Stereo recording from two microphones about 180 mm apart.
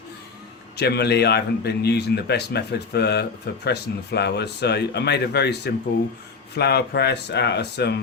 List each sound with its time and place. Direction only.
0.8 s a man's voice: 65° left (ahead or behind)